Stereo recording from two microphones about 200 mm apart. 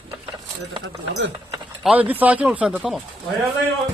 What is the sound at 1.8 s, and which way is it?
Speech, 5° right (ahead or behind).